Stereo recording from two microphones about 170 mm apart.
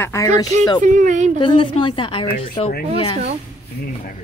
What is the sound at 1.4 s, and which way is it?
A woman's voice, 30° left (ahead or behind).